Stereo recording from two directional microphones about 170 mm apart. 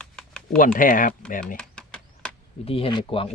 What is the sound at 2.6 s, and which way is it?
Speech, 30° left (ahead or behind).